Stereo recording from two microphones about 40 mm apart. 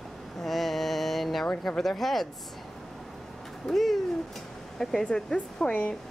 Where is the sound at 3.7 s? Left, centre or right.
Centre.